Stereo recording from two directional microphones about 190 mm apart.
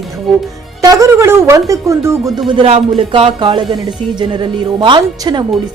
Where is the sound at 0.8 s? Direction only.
15° right (ahead or behind).